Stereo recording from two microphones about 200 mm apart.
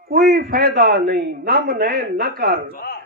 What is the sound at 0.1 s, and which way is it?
A man's voice, 50° right (ahead or behind).